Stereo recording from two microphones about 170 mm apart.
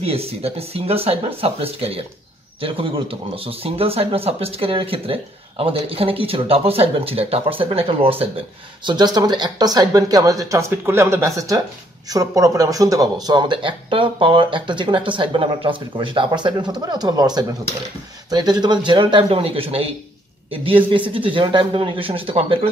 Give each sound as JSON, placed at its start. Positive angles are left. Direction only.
{"t": 0.0, "sound": "speech", "side_deg": -35}